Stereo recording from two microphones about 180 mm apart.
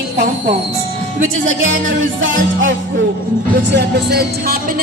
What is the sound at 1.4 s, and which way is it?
A man's voice, 90° right.